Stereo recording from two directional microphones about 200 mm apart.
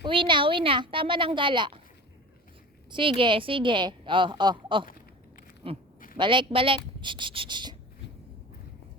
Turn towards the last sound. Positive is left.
turn(degrees=-25)  # may be behind; listen again after turning